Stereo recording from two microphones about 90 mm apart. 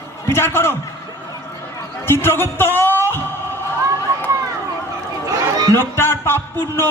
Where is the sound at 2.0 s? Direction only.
25° left (ahead or behind).